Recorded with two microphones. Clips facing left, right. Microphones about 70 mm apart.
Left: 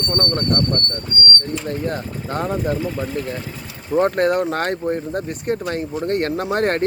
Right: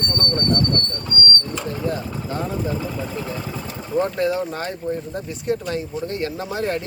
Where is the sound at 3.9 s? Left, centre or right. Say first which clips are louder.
Left 4 dB; left.